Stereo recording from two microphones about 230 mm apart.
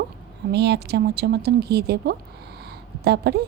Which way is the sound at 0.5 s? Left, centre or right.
Right.